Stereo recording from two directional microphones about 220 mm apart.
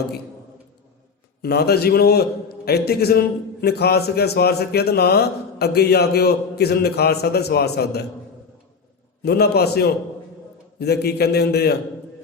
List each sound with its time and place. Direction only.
1.4 s a man's voice: 45° left (ahead or behind)
9.2 s a man's voice: 45° left (ahead or behind)